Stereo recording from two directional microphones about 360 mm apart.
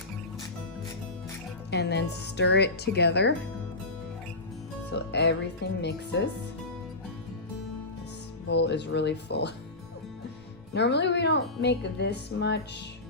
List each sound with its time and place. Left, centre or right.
1.7 s speech: left
4.9 s speech: left
8.4 s speech: left
10.8 s speech: left